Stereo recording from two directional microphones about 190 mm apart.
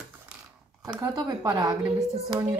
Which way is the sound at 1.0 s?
20° right (ahead or behind).